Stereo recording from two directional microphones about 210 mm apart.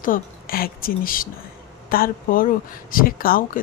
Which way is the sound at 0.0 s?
45° left (ahead or behind).